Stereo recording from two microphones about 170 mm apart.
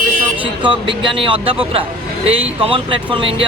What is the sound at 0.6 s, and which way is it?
Speech, 30° right (ahead or behind).